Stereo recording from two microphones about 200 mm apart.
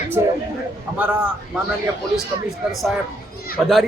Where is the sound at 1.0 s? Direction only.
10° right (ahead or behind).